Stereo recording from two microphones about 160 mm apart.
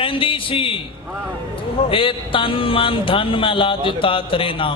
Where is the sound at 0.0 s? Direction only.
35° left (ahead or behind).